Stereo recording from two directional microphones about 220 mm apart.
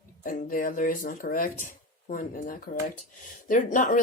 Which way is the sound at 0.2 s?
40° left (ahead or behind).